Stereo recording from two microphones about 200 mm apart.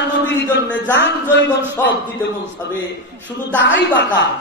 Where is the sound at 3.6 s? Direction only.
60° left (ahead or behind).